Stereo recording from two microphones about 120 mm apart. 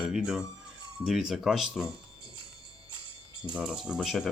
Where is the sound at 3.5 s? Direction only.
5° right (ahead or behind).